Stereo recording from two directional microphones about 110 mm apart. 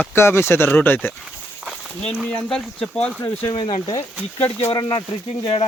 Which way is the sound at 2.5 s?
5° left (ahead or behind).